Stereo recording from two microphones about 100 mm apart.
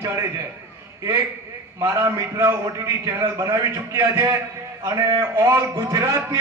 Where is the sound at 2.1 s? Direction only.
25° right (ahead or behind).